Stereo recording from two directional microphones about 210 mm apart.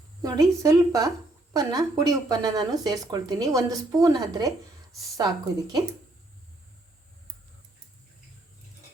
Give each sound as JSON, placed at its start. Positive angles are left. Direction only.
{"t": 0.6, "sound": "speech", "side_deg": -15}